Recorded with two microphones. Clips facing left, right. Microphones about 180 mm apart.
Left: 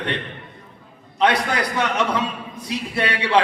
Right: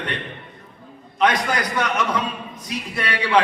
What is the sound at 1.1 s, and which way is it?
Speech, 30° left (ahead or behind).